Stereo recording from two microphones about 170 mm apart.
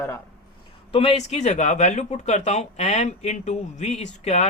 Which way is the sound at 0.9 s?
35° left (ahead or behind).